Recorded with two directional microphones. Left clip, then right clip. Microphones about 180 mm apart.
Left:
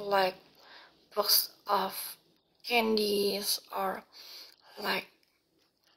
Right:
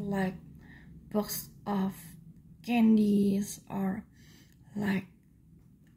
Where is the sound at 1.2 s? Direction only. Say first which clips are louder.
Left 13 dB; 20° right (ahead or behind).